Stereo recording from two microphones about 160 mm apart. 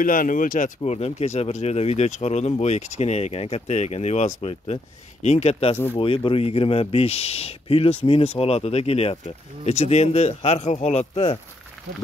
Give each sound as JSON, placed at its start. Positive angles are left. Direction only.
{"t": 0.0, "sound": "speech", "side_deg": 60}